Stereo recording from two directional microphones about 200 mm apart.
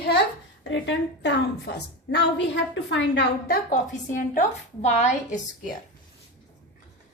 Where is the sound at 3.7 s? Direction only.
40° left (ahead or behind).